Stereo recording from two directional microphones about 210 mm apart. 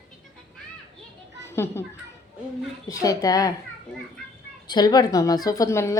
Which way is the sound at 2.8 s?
15° left (ahead or behind).